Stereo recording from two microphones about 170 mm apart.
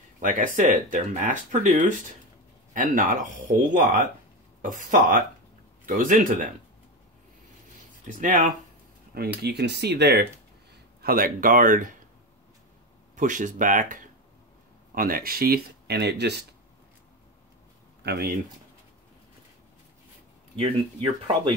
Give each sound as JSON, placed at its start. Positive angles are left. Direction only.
{"t": 0.2, "sound": "speech", "side_deg": -50}
{"t": 8.1, "sound": "speech", "side_deg": -50}
{"t": 9.4, "sound": "speech", "side_deg": -75}
{"t": 11.0, "sound": "speech", "side_deg": -60}
{"t": 13.1, "sound": "speech", "side_deg": -50}
{"t": 18.0, "sound": "speech", "side_deg": -65}
{"t": 20.5, "sound": "speech", "side_deg": -30}